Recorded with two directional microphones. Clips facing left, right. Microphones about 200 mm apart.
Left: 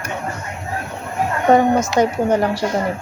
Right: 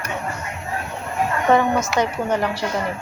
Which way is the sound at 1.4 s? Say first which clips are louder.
Left 4 dB; 40° left (ahead or behind).